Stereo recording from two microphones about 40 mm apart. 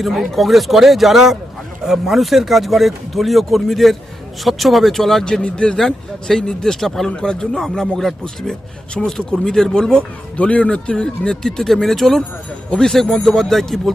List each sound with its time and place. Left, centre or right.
0.0 s speech: centre
5.2 s a man's voice: left
5.7 s speech: centre
7.2 s a man's voice: centre
7.5 s speech: centre
10.3 s speech: left; by 13.9 s centre